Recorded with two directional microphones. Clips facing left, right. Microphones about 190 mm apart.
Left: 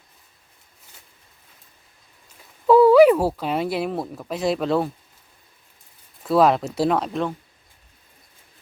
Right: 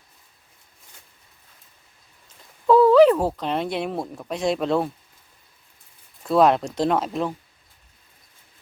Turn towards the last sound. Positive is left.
turn(degrees=0)  # may be behind; listen again after turning